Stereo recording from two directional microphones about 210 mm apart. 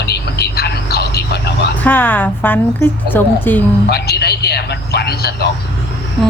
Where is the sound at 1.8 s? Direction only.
10° left (ahead or behind).